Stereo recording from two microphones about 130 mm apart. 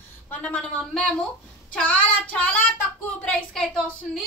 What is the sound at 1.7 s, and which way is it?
A woman's voice, 10° left (ahead or behind).